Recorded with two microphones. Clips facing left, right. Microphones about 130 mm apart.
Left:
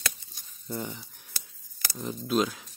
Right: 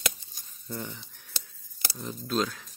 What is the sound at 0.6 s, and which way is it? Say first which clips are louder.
Speech: left 3 dB; 20° left (ahead or behind).